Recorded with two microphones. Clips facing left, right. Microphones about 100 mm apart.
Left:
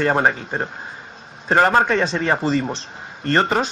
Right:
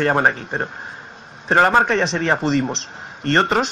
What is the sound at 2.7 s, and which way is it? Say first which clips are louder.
Speech: right 1 dB; 70° right (ahead or behind).